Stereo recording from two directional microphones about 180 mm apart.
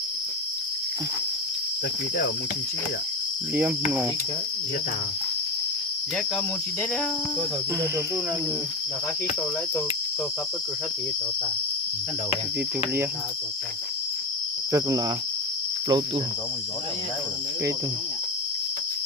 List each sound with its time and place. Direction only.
3.5 s cricket: 10° right (ahead or behind)
14.7 s cricket: 20° right (ahead or behind)